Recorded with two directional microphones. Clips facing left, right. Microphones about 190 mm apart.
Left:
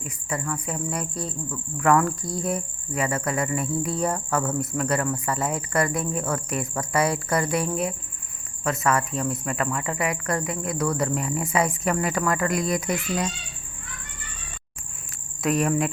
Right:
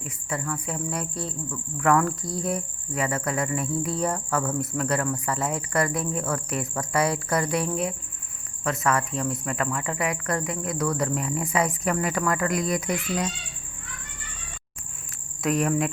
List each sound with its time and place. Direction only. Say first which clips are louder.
0.3 s cricket: left 1 dB; 20° left (ahead or behind)
15.4 s cricket: left 1 dB; 25° left (ahead or behind)